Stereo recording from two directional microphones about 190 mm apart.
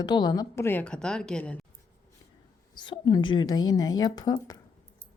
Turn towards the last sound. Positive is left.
turn(degrees=20)  # may be behind; listen again after turning